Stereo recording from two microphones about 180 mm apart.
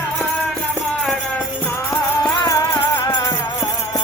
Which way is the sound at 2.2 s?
25° left (ahead or behind).